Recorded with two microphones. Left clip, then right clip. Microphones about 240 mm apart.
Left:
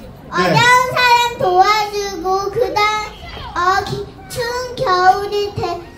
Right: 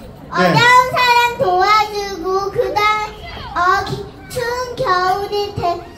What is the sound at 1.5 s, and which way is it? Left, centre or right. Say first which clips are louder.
Child singing: left 2 dB; left.